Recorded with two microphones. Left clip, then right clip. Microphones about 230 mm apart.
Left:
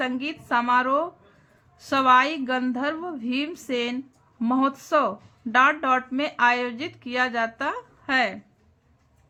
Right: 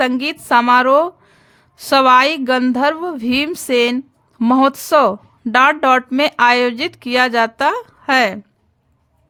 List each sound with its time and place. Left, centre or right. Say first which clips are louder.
0.0 s a woman's voice: right 11 dB; right